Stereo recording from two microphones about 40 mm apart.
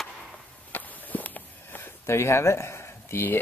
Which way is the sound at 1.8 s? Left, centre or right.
Left.